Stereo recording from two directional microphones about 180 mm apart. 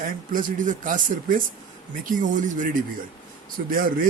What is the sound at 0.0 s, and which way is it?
Speech, 50° right (ahead or behind).